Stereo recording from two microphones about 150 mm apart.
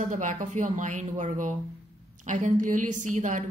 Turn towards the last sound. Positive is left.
turn(degrees=-55)  # may be behind; listen again after turning